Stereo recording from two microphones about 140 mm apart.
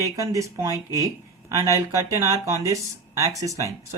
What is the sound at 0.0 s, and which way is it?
Speech, 25° right (ahead or behind).